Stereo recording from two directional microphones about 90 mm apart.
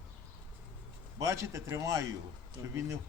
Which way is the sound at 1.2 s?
35° right (ahead or behind).